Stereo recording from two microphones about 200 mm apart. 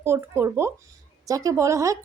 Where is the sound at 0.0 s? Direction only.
15° right (ahead or behind).